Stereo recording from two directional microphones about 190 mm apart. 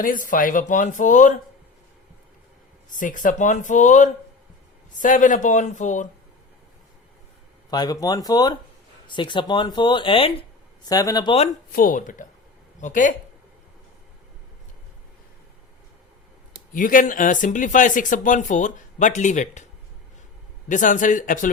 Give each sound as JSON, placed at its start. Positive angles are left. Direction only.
{"t": 0.0, "sound": "speech", "side_deg": 45}
{"t": 2.9, "sound": "speech", "side_deg": 45}
{"t": 7.7, "sound": "speech", "side_deg": 20}
{"t": 10.8, "sound": "speech", "side_deg": 20}
{"t": 11.7, "sound": "speech", "side_deg": 45}
{"t": 16.7, "sound": "speech", "side_deg": 45}
{"t": 20.7, "sound": "speech", "side_deg": 40}